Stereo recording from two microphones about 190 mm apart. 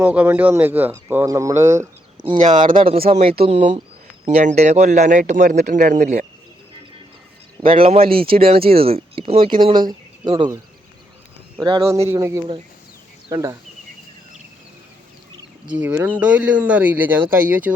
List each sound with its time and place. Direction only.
0.0 s speech: 10° right (ahead or behind); by 6.2 s 40° right (ahead or behind)
7.6 s speech: 30° right (ahead or behind)
11.6 s speech: 25° right (ahead or behind)
15.8 s speech: 10° right (ahead or behind)